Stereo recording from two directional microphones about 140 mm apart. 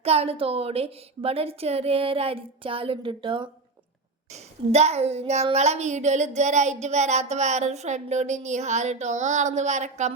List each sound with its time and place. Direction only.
0.0 s a woman's voice: 45° right (ahead or behind)
4.3 s a child's voice: 50° right (ahead or behind)